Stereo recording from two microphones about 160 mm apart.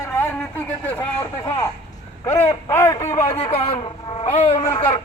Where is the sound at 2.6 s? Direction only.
20° left (ahead or behind).